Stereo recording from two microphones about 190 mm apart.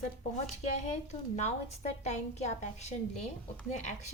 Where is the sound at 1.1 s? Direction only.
35° left (ahead or behind).